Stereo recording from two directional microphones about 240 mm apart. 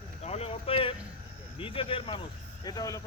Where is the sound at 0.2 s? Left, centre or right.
Left.